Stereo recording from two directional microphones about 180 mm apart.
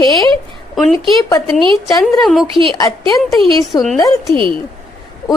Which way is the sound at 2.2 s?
Centre (ahead or behind).